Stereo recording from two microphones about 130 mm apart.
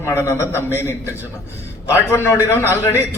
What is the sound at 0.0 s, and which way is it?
A man's voice, 20° left (ahead or behind).